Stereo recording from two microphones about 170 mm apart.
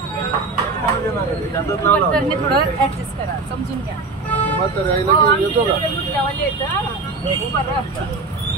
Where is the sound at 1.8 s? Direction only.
10° left (ahead or behind).